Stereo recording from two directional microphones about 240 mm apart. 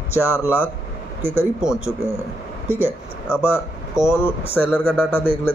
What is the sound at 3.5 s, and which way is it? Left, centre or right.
Speech, centre.